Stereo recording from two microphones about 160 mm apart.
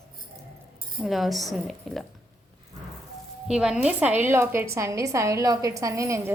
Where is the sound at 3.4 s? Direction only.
5° right (ahead or behind).